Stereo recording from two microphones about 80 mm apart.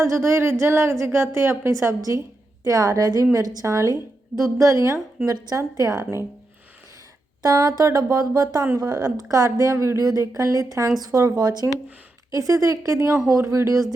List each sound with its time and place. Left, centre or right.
0.0 s a woman's voice: right
7.4 s a woman's voice: right
10.1 s a woman's voice: right